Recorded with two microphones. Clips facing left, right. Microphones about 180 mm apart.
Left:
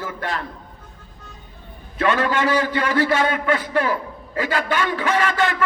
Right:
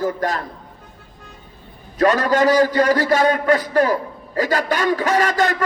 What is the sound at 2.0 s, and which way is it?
A man's voice, 40° right (ahead or behind).